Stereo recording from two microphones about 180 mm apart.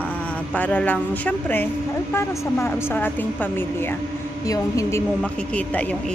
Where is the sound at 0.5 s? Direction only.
10° left (ahead or behind).